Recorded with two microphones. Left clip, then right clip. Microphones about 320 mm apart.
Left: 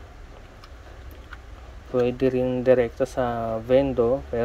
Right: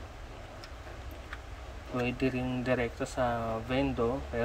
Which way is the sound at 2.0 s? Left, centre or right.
Centre.